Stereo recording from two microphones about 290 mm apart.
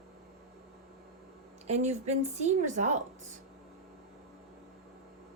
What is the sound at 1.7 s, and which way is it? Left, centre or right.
A woman's voice, right.